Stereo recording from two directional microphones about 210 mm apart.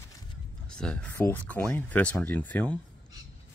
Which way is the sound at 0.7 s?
5° left (ahead or behind).